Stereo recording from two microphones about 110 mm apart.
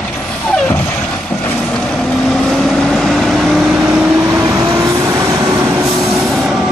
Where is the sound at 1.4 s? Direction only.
5° left (ahead or behind).